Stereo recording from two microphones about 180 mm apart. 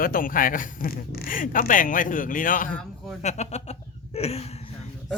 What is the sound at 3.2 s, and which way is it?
Speech, 40° left (ahead or behind).